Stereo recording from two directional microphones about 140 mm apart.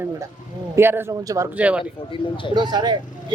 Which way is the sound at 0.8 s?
15° right (ahead or behind).